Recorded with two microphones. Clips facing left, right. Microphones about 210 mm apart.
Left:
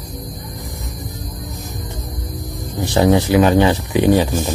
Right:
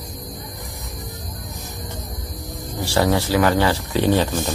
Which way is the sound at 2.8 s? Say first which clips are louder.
Left 5 dB; 20° left (ahead or behind).